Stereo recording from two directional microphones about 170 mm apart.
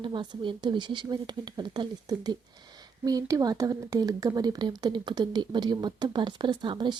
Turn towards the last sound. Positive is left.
turn(degrees=-25)  # may be behind; listen again after turning